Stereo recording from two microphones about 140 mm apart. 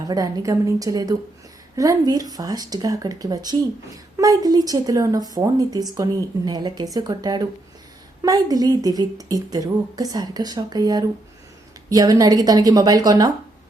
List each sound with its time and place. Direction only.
0.0 s speech: 25° right (ahead or behind)